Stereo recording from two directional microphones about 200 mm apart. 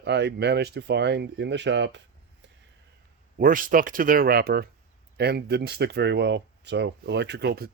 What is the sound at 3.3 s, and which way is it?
Speech, 45° right (ahead or behind).